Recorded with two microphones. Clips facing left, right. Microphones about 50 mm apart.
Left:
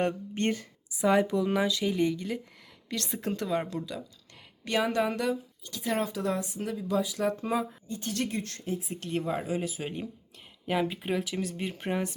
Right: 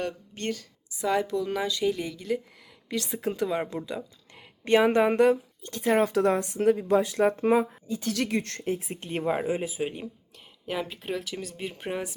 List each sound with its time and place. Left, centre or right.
0.0 s speech: left
1.0 s a woman's voice: centre
3.7 s a woman's voice: right
6.1 s speech: right
8.0 s speech: right
9.1 s speech: right; by 9.9 s centre
10.7 s speech: centre